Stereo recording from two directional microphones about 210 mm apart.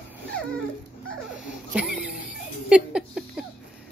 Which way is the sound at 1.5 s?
5° right (ahead or behind).